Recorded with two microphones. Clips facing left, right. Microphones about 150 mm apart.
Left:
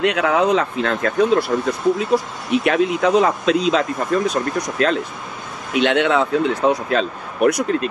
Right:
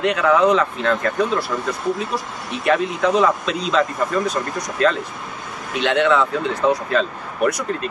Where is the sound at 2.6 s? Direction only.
60° left (ahead or behind).